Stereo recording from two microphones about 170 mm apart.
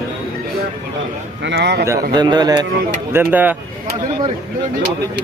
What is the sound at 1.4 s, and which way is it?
Speech, 90° right.